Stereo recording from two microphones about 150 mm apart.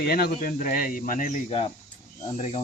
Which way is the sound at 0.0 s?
90° left.